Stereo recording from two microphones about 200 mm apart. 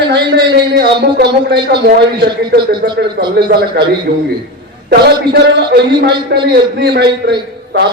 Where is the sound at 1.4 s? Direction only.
55° right (ahead or behind).